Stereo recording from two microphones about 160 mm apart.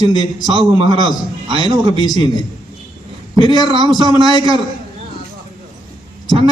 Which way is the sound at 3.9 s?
30° right (ahead or behind).